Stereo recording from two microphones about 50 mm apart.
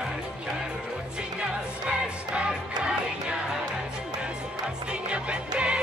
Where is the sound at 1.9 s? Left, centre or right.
Centre.